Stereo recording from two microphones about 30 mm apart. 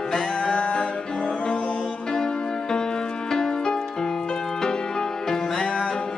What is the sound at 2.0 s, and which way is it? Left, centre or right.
Music, left.